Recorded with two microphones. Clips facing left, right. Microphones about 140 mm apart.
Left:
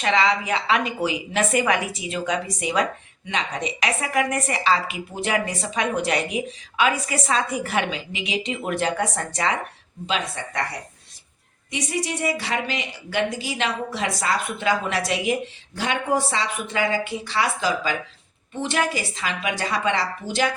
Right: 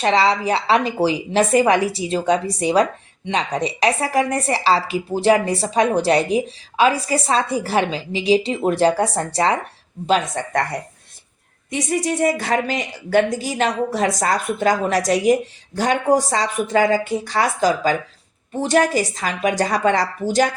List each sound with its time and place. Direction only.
0.0 s a woman's voice: 35° right (ahead or behind)
10.1 s speech: 50° right (ahead or behind)